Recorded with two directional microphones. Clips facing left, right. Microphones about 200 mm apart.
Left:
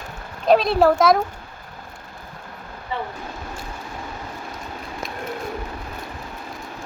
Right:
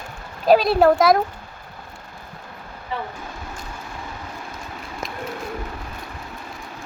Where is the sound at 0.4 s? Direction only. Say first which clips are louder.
Right 1 dB; centre (ahead or behind).